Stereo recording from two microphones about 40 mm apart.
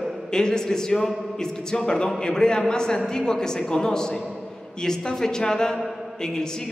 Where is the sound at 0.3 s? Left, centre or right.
Centre.